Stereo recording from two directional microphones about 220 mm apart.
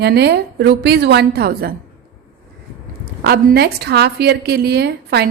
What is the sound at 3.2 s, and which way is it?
A woman's voice, 50° right (ahead or behind).